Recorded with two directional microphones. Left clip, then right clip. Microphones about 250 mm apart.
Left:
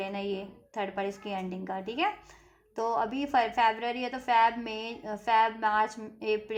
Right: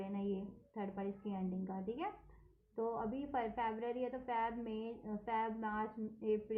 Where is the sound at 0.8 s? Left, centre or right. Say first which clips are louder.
Left 12 dB; left.